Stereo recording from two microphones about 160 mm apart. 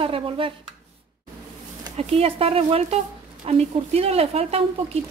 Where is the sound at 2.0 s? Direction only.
40° right (ahead or behind).